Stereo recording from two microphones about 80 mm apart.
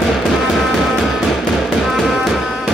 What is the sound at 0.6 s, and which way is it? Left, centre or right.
Music, centre.